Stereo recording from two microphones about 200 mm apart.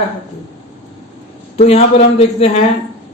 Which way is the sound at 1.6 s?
30° left (ahead or behind).